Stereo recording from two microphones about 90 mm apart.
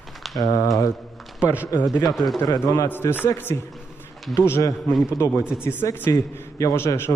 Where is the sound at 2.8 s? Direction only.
25° left (ahead or behind).